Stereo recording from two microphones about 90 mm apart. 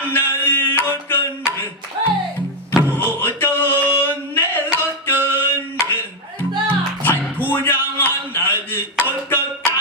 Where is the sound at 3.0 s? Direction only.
20° left (ahead or behind).